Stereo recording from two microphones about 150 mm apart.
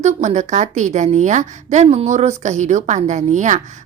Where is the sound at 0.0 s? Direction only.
50° right (ahead or behind).